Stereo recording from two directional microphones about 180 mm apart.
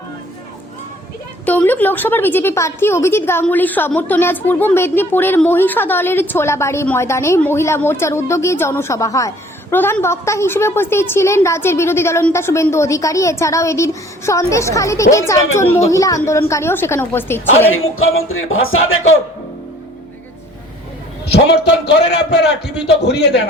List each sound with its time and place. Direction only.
1.5 s a woman's voice: 10° left (ahead or behind)
18.0 s speech: 90° left
22.1 s a man's voice: 70° left (ahead or behind)